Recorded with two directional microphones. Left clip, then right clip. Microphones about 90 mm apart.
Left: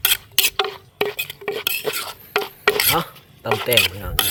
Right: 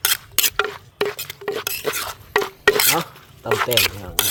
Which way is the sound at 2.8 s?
5° right (ahead or behind).